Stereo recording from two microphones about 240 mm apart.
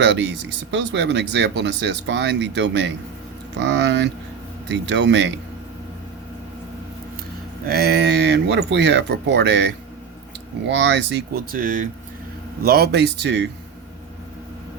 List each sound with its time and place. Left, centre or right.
0.0 s speech: right
7.7 s speech: right